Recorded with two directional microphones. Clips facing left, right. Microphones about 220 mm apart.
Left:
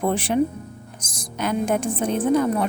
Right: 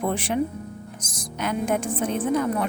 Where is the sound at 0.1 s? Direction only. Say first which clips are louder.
Left 4 dB; 30° left (ahead or behind).